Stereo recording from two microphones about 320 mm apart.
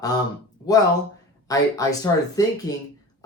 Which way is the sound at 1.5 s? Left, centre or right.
Centre.